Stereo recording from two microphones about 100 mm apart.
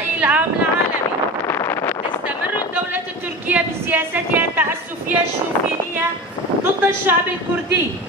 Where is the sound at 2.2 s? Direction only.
15° right (ahead or behind).